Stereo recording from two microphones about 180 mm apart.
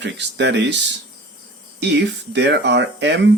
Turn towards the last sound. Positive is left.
turn(degrees=-75)  # may be behind; listen again after turning